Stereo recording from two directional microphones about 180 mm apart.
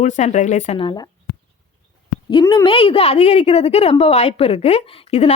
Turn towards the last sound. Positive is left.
turn(degrees=35)  # may be behind; listen again after turning